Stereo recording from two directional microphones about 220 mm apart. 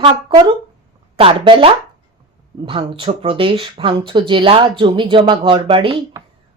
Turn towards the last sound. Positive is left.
turn(degrees=-25)  # may be behind; listen again after turning